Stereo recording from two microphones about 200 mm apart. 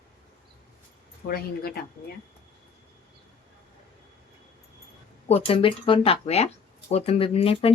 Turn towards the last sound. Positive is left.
turn(degrees=30)  # may be behind; listen again after turning